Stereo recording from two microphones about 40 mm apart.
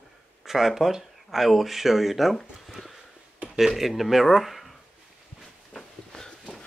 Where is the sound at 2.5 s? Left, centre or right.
Centre.